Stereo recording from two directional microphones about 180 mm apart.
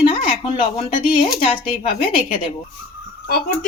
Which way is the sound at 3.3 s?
55° left (ahead or behind).